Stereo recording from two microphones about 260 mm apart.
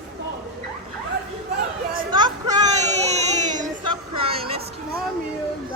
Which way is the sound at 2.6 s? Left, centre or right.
Right.